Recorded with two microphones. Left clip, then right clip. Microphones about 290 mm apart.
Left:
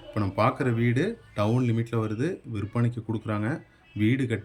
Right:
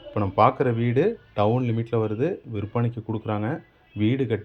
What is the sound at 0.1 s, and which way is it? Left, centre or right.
Speech, centre.